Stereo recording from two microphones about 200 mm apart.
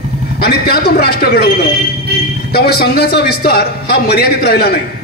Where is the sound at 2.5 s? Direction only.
50° left (ahead or behind).